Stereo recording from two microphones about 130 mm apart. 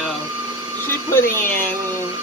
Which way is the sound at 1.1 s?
20° left (ahead or behind).